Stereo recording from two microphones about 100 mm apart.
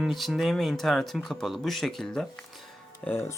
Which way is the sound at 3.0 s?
20° left (ahead or behind).